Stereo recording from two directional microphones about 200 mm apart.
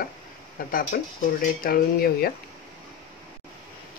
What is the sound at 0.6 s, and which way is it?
Speech, 45° left (ahead or behind).